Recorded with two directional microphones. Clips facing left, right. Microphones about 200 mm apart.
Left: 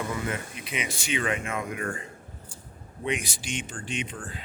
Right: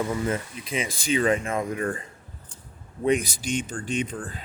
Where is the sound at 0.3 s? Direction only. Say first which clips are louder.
Right 5 dB; 30° right (ahead or behind).